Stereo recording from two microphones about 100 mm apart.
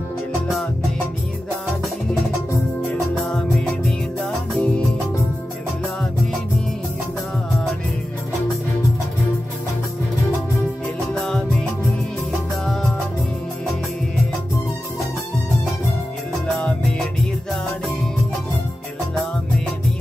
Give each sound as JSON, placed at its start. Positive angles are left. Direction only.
{"t": 3.3, "sound": "music", "side_deg": 5}
{"t": 11.1, "sound": "music", "side_deg": 5}
{"t": 16.5, "sound": "music", "side_deg": 10}